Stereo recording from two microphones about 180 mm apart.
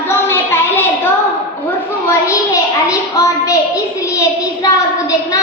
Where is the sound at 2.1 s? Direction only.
15° left (ahead or behind).